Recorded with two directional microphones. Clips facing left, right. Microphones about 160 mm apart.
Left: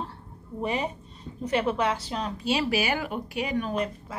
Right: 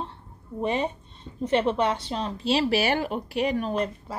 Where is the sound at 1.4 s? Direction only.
30° right (ahead or behind).